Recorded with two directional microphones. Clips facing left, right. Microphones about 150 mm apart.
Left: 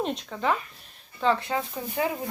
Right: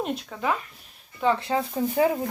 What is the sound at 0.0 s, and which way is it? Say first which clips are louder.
Speech: even; 5° right (ahead or behind).